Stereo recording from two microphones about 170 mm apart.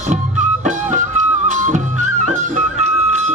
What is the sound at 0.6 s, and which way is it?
Music, 45° right (ahead or behind).